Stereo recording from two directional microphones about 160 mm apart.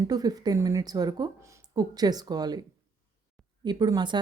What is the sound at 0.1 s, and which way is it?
Speech, 25° right (ahead or behind).